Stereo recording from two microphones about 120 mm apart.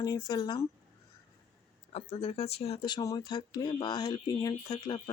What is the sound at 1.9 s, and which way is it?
Speech, 60° left (ahead or behind).